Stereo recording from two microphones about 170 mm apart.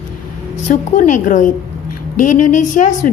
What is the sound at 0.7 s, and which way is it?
Speech, 50° left (ahead or behind).